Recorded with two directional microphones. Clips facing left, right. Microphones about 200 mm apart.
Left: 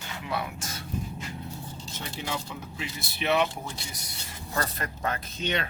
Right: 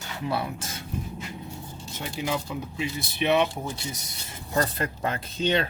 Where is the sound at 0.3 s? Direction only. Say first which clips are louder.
Right 4 dB; 30° right (ahead or behind).